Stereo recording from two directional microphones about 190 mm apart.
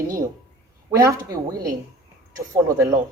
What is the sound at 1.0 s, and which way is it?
Speech, 15° right (ahead or behind).